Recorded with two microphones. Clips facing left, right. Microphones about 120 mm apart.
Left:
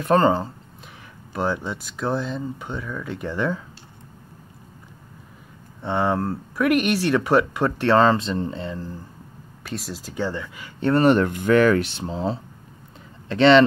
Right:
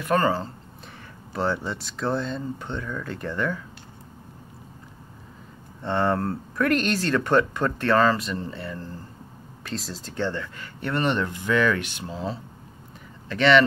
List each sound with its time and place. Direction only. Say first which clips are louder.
0.0 s speech: left 4 dB; 25° left (ahead or behind)
1.3 s speech: left 1 dB; 5° left (ahead or behind)
3.3 s speech: left 3 dB; 20° left (ahead or behind)
5.8 s speech: left 1 dB; 5° left (ahead or behind)
9.7 s speech: left 2 dB; 5° left (ahead or behind)
11.0 s speech: left 7 dB; 45° left (ahead or behind)
11.9 s speech: left 5 dB; 30° left (ahead or behind)